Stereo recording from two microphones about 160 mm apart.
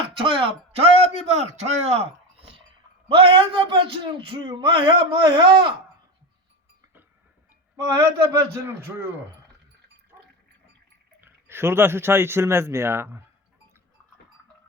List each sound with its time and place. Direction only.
0.2 s a man's voice: 35° right (ahead or behind)
1.3 s a man's voice: 45° right (ahead or behind)
3.1 s a man's voice: 35° right (ahead or behind)
7.8 s a man's voice: 20° right (ahead or behind)
11.2 s speech: 15° right (ahead or behind)